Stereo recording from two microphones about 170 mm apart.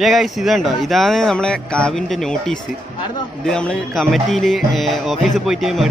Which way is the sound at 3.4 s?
5° left (ahead or behind).